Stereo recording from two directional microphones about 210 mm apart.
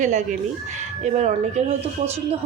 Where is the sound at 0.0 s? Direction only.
35° right (ahead or behind).